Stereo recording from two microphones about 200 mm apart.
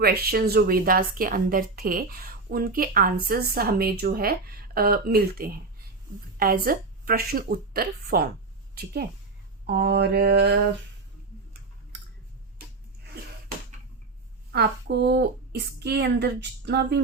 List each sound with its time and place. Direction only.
0.0 s a woman's voice: 50° right (ahead or behind)
14.5 s a woman's voice: 55° right (ahead or behind)